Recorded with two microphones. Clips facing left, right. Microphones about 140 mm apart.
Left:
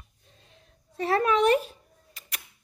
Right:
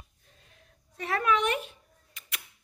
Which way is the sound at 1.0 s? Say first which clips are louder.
Left 4 dB; 35° left (ahead or behind).